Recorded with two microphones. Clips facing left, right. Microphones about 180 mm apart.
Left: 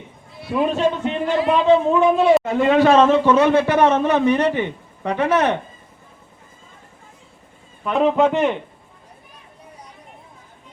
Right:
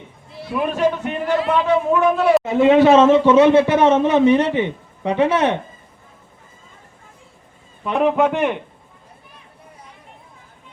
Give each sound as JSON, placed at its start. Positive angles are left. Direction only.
{"t": 0.5, "sound": "a man's voice", "side_deg": 25}
{"t": 2.5, "sound": "a man's voice", "side_deg": -15}
{"t": 7.9, "sound": "a man's voice", "side_deg": -10}